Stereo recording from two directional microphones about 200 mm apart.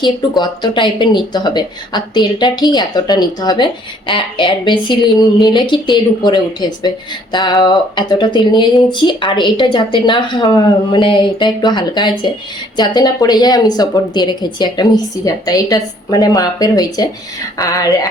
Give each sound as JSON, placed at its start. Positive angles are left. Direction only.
{"t": 0.0, "sound": "speech", "side_deg": 20}